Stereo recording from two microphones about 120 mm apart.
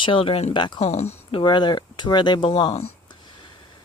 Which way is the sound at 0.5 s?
40° left (ahead or behind).